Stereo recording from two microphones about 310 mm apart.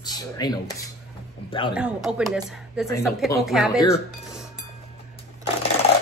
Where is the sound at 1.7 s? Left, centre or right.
Centre.